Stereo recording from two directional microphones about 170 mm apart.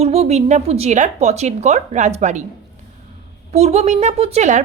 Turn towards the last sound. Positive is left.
turn(degrees=-40)  # may be behind; listen again after turning